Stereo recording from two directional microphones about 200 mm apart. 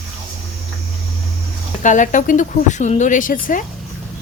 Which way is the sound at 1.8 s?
40° left (ahead or behind).